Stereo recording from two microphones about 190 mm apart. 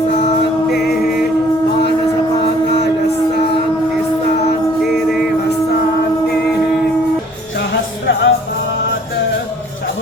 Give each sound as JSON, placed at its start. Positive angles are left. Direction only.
{"t": 0.7, "sound": "music", "side_deg": 50}
{"t": 7.7, "sound": "music", "side_deg": 75}